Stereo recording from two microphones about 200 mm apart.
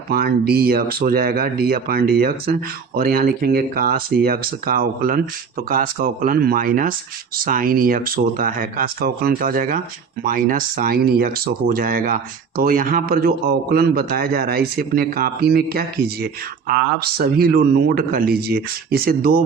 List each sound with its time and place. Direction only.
0.1 s speech: 50° right (ahead or behind)